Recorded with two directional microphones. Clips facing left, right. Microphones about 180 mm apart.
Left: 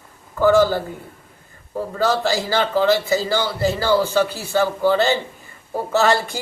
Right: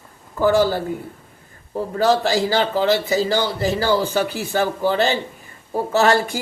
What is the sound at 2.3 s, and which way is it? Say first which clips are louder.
A man's voice: right 1 dB; 15° right (ahead or behind).